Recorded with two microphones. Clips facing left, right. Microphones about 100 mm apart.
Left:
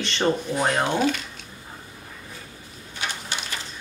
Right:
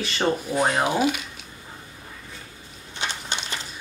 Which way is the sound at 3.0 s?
25° right (ahead or behind).